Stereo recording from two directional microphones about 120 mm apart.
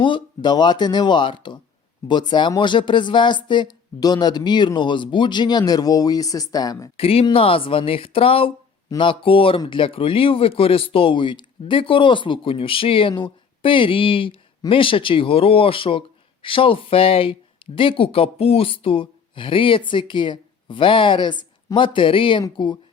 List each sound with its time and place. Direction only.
0.0 s speech: 40° left (ahead or behind)
6.9 s speech: 55° left (ahead or behind)